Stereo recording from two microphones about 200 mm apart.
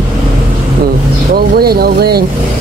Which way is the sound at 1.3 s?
50° right (ahead or behind).